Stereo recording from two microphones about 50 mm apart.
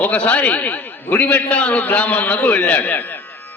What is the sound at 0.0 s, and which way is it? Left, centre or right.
A man's voice, left.